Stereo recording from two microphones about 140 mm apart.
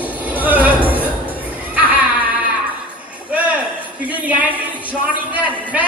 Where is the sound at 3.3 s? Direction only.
10° right (ahead or behind).